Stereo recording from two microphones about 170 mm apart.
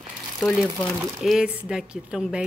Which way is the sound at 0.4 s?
Centre (ahead or behind).